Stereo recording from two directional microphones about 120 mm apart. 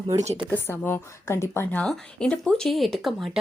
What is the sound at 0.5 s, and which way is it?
Speech, 15° left (ahead or behind).